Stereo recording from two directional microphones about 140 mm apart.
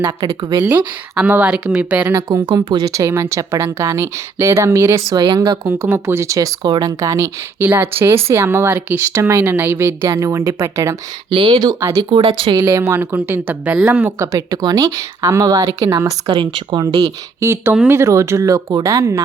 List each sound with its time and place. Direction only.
0.2 s a woman's voice: 30° right (ahead or behind)
1.1 s speech: 10° right (ahead or behind)
2.6 s a woman's voice: 30° right (ahead or behind)
7.6 s speech: 15° right (ahead or behind)
11.3 s speech: 35° right (ahead or behind); by 12.0 s 20° right (ahead or behind)
12.1 s speech: 40° right (ahead or behind)
12.6 s speech: 15° right (ahead or behind)
14.3 s a woman's voice: 30° right (ahead or behind)
16.2 s a woman's voice: 35° right (ahead or behind)